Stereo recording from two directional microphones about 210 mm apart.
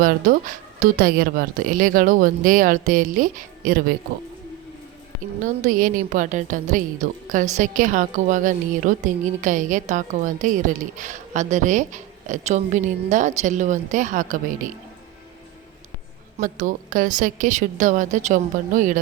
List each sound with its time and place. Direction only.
0.0 s a woman's voice: 40° right (ahead or behind)
5.4 s a woman's voice: 35° right (ahead or behind)
16.4 s a woman's voice: 40° right (ahead or behind)